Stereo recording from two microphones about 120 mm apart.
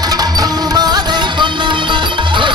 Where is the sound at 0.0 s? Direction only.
35° right (ahead or behind).